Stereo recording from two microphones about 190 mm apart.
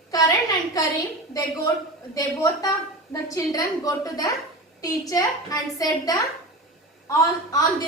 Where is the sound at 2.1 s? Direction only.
20° left (ahead or behind).